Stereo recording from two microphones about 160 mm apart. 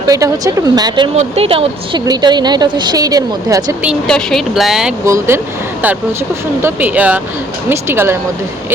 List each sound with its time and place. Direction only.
0.1 s a woman's voice: 20° right (ahead or behind)
1.1 s a woman's voice: 40° right (ahead or behind); by 3.8 s 20° right (ahead or behind)
4.0 s speech: 5° left (ahead or behind)
5.0 s speech: 15° right (ahead or behind)
6.6 s speech: 15° right (ahead or behind)